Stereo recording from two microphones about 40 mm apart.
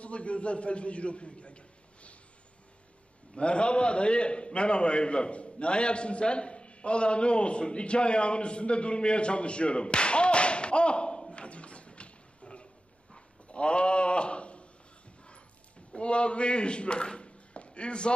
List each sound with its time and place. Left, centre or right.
0.0 s a man's voice: left
3.3 s a man's voice: left
11.3 s a sound: left
15.9 s speech: left